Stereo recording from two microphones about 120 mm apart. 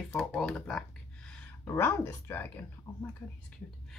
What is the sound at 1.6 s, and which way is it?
Speech, 20° left (ahead or behind).